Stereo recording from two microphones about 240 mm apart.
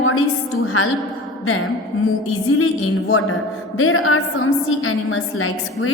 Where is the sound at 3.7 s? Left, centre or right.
Left.